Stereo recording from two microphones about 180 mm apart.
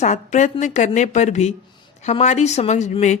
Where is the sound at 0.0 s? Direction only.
40° left (ahead or behind).